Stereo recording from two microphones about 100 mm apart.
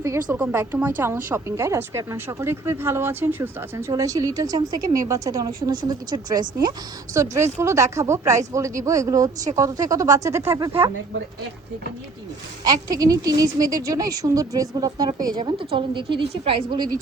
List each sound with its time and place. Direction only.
0.3 s speech: 15° right (ahead or behind)
0.5 s speech: 25° right (ahead or behind); by 7.2 s 40° right (ahead or behind)
7.2 s a woman's voice: 25° right (ahead or behind)
12.6 s a woman's voice: 40° right (ahead or behind)